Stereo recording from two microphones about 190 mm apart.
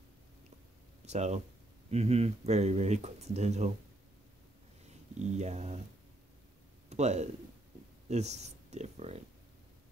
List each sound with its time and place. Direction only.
1.0 s speech: 35° right (ahead or behind)
5.2 s speech: 35° right (ahead or behind)
6.9 s speech: 35° right (ahead or behind)